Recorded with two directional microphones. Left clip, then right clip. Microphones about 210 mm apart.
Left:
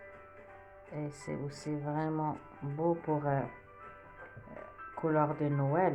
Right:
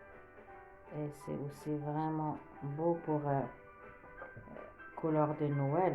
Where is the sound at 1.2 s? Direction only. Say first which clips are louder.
Left 2 dB; 30° left (ahead or behind).